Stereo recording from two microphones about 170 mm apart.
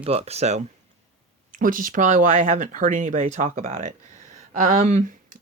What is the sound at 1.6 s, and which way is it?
Speech, 55° right (ahead or behind).